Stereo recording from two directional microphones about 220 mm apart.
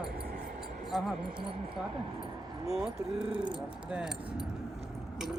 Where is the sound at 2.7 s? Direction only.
5° right (ahead or behind).